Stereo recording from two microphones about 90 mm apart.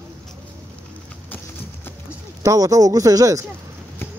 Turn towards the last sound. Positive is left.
turn(degrees=-40)  # may be behind; listen again after turning